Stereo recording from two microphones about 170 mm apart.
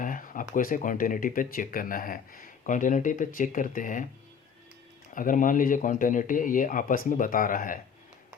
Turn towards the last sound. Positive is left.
turn(degrees=55)  # may be behind; listen again after turning